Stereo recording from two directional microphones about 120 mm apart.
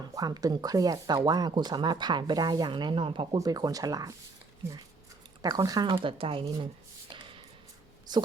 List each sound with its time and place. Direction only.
0.1 s speech: 30° right (ahead or behind)
3.3 s speech: 30° right (ahead or behind)
5.4 s speech: 35° right (ahead or behind)
5.9 s speech: 45° right (ahead or behind)
8.1 s speech: 35° right (ahead or behind)